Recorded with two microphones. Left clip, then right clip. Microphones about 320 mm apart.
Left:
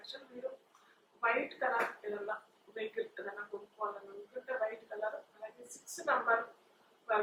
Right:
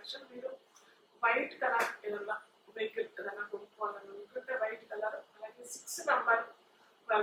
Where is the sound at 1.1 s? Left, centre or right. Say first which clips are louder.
Right 2 dB; centre.